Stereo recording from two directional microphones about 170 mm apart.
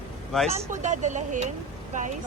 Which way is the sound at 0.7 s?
45° right (ahead or behind).